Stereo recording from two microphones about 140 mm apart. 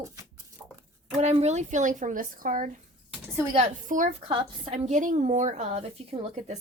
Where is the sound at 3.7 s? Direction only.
65° right (ahead or behind).